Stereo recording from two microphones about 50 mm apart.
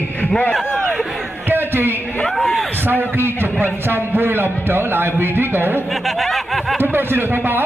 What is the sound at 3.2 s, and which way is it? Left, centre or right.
A man's voice, right.